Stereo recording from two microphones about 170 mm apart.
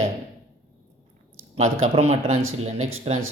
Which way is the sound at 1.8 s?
40° right (ahead or behind).